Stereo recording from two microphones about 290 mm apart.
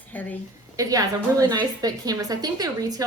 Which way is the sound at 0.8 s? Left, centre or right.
Centre.